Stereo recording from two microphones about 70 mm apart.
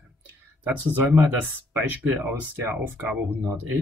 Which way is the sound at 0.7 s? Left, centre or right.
Right.